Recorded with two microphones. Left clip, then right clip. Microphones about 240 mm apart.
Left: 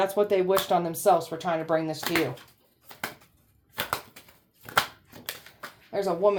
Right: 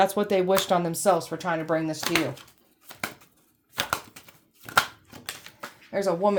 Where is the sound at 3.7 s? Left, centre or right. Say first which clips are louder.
Right 2 dB; right.